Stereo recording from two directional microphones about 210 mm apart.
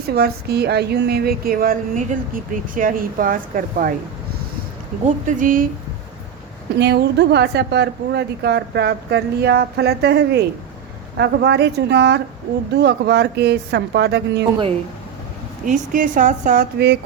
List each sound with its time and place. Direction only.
0.1 s a woman's voice: 50° right (ahead or behind)
5.0 s a woman's voice: 35° right (ahead or behind)
6.7 s a woman's voice: 50° right (ahead or behind)
15.6 s a woman's voice: 40° right (ahead or behind)